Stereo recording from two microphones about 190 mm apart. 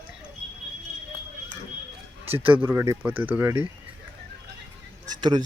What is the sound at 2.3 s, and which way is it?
Speech, 10° right (ahead or behind).